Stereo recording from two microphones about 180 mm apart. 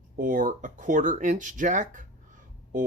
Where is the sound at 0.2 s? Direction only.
50° right (ahead or behind).